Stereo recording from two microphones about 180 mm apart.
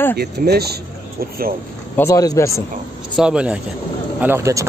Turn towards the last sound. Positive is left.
turn(degrees=-15)  # may be behind; listen again after turning